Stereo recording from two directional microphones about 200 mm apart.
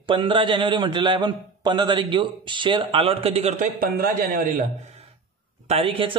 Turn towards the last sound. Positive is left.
turn(degrees=-30)  # may be behind; listen again after turning